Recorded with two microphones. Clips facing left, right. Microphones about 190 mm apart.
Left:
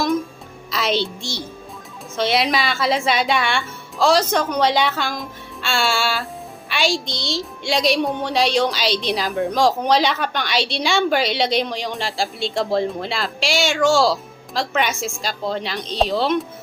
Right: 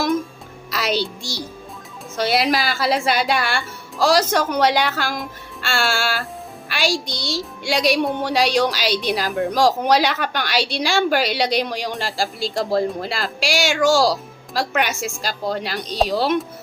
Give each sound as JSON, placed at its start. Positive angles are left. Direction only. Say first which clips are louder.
{"t": 0.7, "sound": "a woman's voice", "louder": "left 1 dB", "side_deg": 0}